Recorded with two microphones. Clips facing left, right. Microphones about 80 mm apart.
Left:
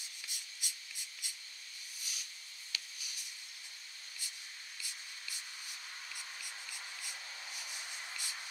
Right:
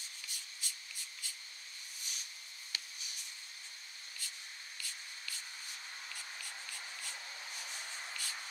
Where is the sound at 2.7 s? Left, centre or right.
Right.